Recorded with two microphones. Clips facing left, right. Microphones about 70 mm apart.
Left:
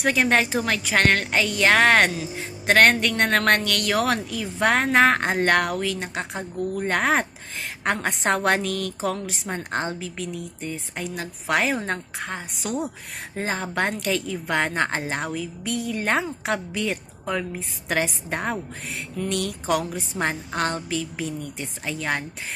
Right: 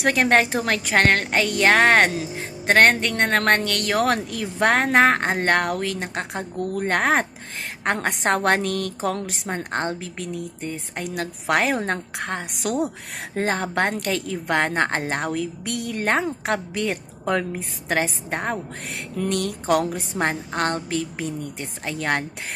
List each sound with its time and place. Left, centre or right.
0.0 s a woman's voice: right
1.7 s a woman's voice: right
4.3 s a woman's voice: right
5.7 s a woman's voice: right
6.6 s a woman's voice: right
9.1 s a woman's voice: right
16.0 s a woman's voice: right
17.8 s a woman's voice: right
18.9 s a woman's voice: right
19.3 s a woman's voice: right